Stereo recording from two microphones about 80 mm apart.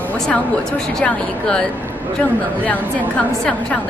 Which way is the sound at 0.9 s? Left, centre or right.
Centre.